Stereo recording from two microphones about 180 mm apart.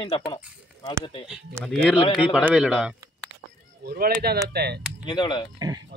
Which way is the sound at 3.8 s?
55° right (ahead or behind).